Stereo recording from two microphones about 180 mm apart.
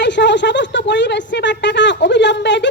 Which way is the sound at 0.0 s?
75° left (ahead or behind).